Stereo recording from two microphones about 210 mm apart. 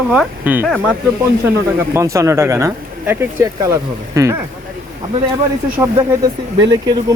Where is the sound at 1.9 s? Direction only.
15° right (ahead or behind).